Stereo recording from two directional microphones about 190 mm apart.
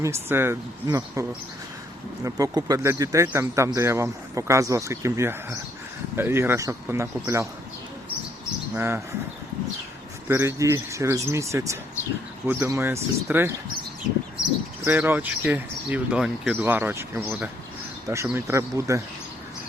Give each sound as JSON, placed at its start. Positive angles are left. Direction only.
{"t": 0.0, "sound": "speech", "side_deg": -15}
{"t": 8.7, "sound": "speech", "side_deg": -15}
{"t": 10.2, "sound": "speech", "side_deg": -15}
{"t": 14.8, "sound": "speech", "side_deg": -10}